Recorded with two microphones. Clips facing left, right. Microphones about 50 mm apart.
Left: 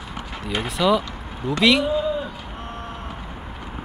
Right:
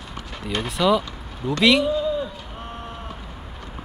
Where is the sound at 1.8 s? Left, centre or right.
Centre.